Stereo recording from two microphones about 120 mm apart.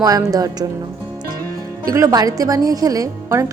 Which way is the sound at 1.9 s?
30° right (ahead or behind).